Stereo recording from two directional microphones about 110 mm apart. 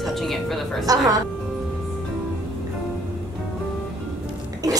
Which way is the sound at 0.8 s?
35° right (ahead or behind).